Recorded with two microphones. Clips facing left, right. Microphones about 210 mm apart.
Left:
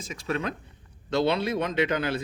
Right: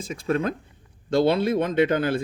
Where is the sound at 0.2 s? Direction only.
50° right (ahead or behind).